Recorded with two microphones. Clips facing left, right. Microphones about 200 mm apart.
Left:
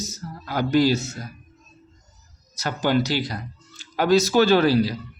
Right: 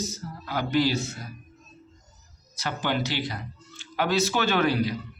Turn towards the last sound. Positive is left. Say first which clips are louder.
# left 6 dB
turn(degrees=35)  # may be behind; listen again after turning